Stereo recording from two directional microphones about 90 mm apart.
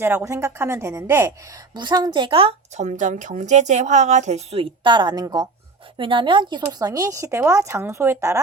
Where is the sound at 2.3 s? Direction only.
90° right.